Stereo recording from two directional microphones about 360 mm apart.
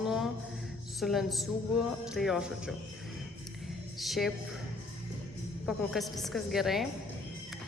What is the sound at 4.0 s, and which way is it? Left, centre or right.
Speech, centre.